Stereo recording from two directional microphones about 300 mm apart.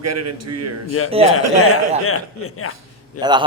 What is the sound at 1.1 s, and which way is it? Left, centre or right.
Speech, centre.